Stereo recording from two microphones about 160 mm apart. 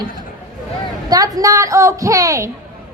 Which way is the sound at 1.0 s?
20° right (ahead or behind).